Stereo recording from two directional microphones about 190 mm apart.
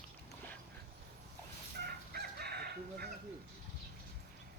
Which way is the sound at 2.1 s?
55° right (ahead or behind).